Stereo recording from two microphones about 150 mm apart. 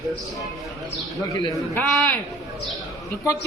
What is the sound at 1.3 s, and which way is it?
Speech, 20° left (ahead or behind).